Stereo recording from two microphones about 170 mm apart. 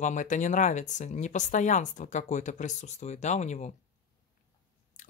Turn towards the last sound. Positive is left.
turn(degrees=45)  # may be behind; listen again after turning